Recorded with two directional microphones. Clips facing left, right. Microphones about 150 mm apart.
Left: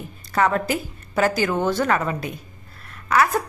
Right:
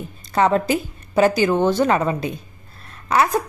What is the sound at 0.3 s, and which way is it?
A woman's voice, 25° right (ahead or behind).